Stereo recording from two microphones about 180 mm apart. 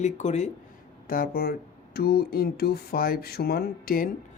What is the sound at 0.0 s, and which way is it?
Speech, 40° left (ahead or behind).